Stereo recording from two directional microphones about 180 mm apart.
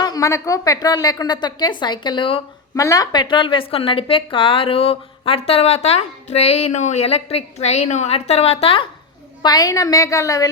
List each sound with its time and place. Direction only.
0.0 s a woman's voice: 20° left (ahead or behind)
9.4 s a woman's voice: 20° left (ahead or behind)